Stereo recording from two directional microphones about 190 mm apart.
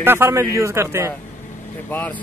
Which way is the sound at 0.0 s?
10° right (ahead or behind).